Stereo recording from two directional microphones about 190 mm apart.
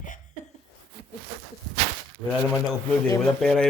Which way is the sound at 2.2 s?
5° right (ahead or behind).